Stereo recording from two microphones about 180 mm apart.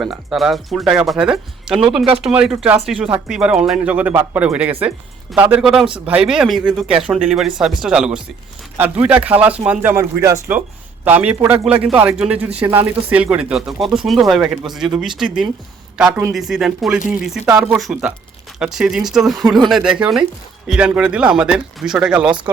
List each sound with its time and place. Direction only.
0.0 s speech: centre (ahead or behind)
14.8 s speech: 25° right (ahead or behind)
16.0 s speech: 5° right (ahead or behind)